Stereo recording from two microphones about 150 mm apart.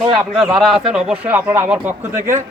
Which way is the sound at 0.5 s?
Centre (ahead or behind).